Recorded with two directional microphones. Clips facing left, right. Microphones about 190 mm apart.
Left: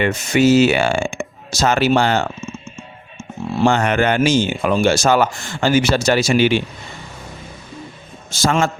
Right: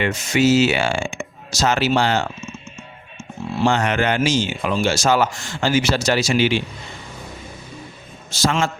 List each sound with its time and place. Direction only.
0.0 s speech: 55° left (ahead or behind)
3.6 s speech: 55° left (ahead or behind)
8.3 s speech: 50° left (ahead or behind)